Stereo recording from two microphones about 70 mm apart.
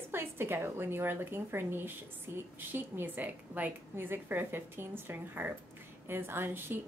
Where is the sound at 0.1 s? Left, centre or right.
Right.